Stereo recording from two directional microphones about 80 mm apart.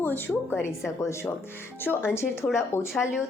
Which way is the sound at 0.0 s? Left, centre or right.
Left.